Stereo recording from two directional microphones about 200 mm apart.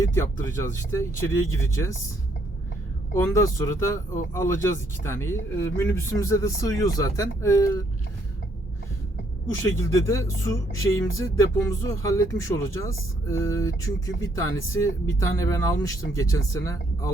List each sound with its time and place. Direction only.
0.0 s speech: 15° left (ahead or behind)
3.2 s speech: 15° left (ahead or behind)
9.9 s speech: 15° left (ahead or behind)